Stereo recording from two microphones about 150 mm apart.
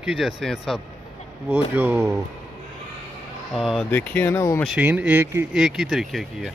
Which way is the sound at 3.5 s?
Centre (ahead or behind).